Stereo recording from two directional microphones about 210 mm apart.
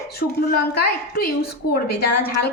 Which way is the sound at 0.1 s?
50° left (ahead or behind).